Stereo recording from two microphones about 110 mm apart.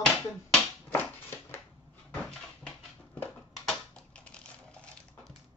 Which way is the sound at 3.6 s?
10° left (ahead or behind).